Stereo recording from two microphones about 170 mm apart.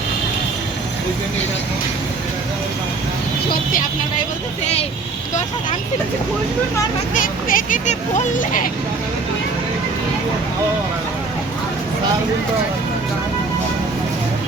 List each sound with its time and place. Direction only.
3.5 s speech: 55° left (ahead or behind)
7.1 s speech: 50° left (ahead or behind)